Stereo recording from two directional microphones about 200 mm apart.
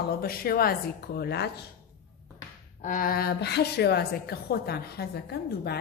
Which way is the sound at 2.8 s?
45° left (ahead or behind).